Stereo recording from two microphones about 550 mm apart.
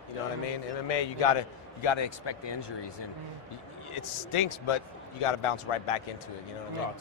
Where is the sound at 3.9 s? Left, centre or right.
Left.